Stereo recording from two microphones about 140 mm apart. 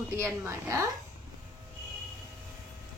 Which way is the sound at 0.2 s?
20° right (ahead or behind).